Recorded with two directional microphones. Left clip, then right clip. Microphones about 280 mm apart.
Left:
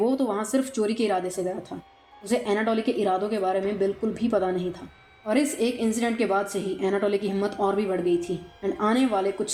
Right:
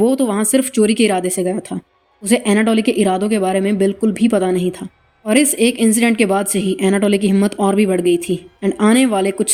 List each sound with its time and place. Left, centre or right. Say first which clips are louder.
0.0 s a woman's voice: right 9 dB; right